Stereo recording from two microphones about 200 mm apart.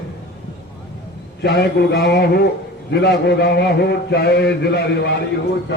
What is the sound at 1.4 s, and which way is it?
A man's voice, 55° left (ahead or behind).